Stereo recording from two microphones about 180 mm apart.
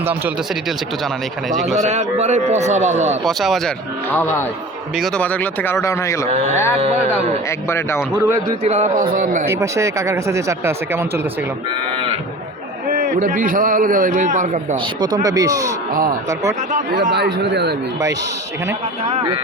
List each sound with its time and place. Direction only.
1.7 s a man's voice: 40° right (ahead or behind)
3.2 s speech: centre (ahead or behind)
4.1 s a man's voice: 10° left (ahead or behind)
7.7 s a man's voice: 15° left (ahead or behind)
8.6 s a man's voice: 40° right (ahead or behind)
9.5 s speech: 15° right (ahead or behind)
12.9 s a man's voice: 50° right (ahead or behind)
15.0 s speech: 20° right (ahead or behind)
17.0 s a man's voice: 75° right (ahead or behind)